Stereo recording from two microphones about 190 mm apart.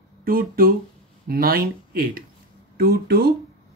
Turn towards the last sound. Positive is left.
turn(degrees=-55)  # may be behind; listen again after turning